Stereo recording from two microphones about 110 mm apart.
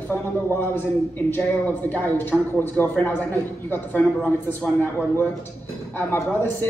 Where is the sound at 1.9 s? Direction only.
20° left (ahead or behind).